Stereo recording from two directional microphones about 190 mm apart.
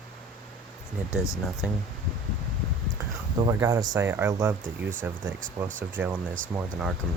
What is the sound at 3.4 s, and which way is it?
Speech, 20° right (ahead or behind).